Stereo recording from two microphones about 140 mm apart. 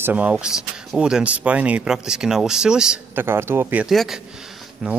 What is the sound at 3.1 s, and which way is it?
Speech, 15° right (ahead or behind).